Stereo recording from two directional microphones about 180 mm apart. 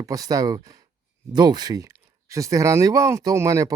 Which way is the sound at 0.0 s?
20° right (ahead or behind).